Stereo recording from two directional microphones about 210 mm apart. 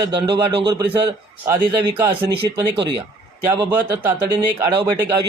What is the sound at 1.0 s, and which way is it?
Speech, 10° right (ahead or behind).